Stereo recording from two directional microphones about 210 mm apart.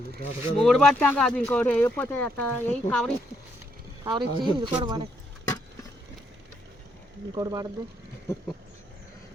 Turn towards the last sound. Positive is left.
turn(degrees=-20)  # may be behind; listen again after turning